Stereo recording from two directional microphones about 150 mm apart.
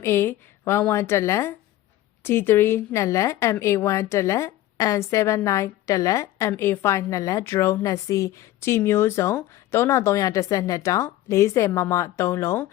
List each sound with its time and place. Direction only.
0.0 s a woman's voice: 15° left (ahead or behind)